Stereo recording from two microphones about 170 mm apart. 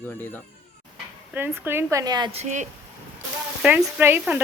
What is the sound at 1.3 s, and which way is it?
Speech, 10° right (ahead or behind).